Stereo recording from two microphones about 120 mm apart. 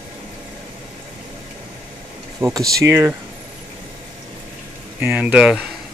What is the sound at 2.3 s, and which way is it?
Speech, 25° right (ahead or behind).